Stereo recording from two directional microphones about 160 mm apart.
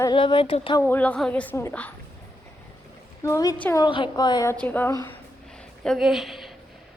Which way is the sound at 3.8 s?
30° left (ahead or behind).